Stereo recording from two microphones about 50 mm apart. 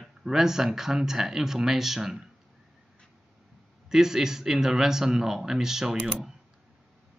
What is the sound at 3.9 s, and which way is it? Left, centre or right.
Speech, centre.